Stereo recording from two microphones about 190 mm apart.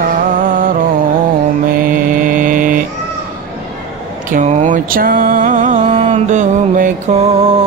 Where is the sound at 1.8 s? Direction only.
45° right (ahead or behind).